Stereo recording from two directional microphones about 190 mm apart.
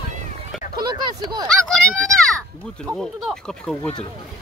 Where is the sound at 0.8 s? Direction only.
20° right (ahead or behind).